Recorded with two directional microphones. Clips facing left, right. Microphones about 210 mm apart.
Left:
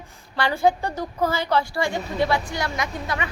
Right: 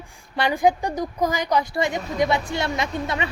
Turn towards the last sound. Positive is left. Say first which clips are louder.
# right 2 dB
turn(degrees=-25)  # may be behind; listen again after turning